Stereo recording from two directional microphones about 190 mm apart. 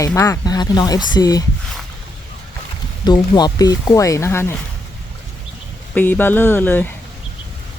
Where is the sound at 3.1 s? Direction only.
20° left (ahead or behind).